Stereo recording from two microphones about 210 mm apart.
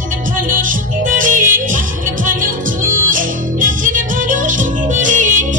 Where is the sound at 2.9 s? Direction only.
40° right (ahead or behind).